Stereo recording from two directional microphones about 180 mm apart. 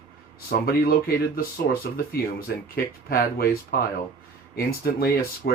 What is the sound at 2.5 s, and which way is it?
Speech, 65° left (ahead or behind).